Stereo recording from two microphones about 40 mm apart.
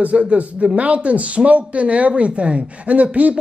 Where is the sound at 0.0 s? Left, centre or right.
Right.